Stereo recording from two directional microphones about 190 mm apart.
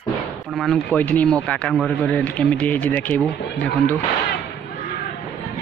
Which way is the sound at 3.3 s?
65° left (ahead or behind).